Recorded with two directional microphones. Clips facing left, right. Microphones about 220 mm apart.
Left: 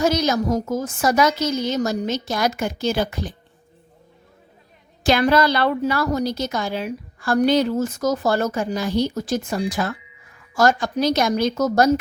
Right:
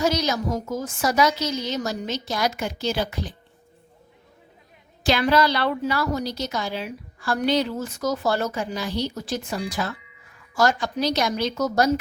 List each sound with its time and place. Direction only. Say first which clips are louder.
0.0 s a woman's voice: left 4 dB; 50° left (ahead or behind)
5.0 s a woman's voice: left 3 dB; 50° left (ahead or behind)